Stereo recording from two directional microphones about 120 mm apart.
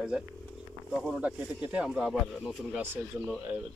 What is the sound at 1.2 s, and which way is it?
Speech, 10° right (ahead or behind).